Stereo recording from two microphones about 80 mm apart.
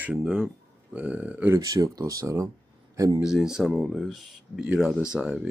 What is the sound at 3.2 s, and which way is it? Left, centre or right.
Speech, centre.